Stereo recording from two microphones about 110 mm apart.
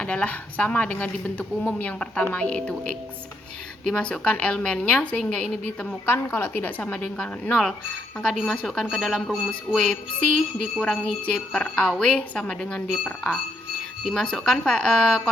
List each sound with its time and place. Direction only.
0.0 s speech: 10° left (ahead or behind)
6.1 s speech: 20° left (ahead or behind)